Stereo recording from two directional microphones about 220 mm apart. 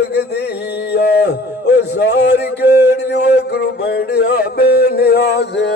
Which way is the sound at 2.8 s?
50° left (ahead or behind).